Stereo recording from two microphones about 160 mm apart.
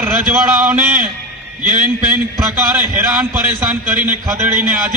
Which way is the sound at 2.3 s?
20° right (ahead or behind).